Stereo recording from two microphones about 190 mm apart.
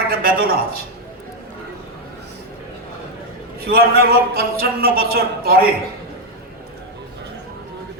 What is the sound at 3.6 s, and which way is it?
A man's voice, 55° right (ahead or behind).